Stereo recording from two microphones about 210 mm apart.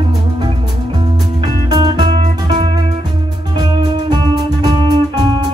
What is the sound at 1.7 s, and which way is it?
Music, 20° right (ahead or behind).